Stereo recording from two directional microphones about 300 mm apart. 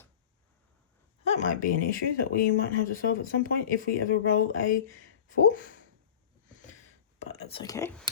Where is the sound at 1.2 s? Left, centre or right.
Left.